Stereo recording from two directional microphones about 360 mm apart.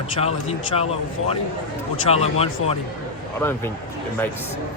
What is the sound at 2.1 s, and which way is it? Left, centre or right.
Speech, centre.